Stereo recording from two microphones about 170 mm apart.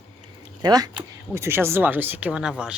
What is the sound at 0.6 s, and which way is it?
Speech, 20° right (ahead or behind).